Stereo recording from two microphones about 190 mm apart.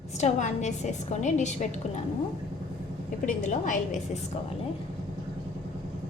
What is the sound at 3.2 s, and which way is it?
Speech, 40° left (ahead or behind).